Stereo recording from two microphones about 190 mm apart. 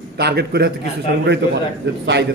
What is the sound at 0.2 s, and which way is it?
A man's voice, 60° right (ahead or behind).